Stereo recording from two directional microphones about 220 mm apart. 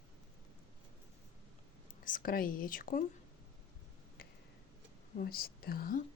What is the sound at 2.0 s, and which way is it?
A woman's voice, 40° left (ahead or behind).